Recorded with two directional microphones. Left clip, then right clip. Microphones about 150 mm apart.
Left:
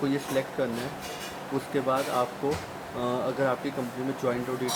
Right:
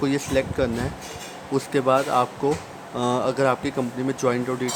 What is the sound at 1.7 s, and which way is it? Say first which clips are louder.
Speech: right 7 dB; 45° right (ahead or behind).